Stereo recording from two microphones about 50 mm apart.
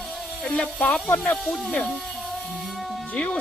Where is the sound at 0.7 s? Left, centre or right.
Left.